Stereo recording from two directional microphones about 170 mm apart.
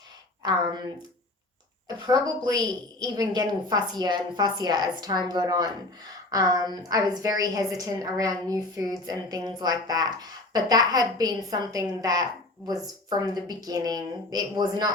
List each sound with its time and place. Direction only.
2.0 s a woman's voice: 25° right (ahead or behind)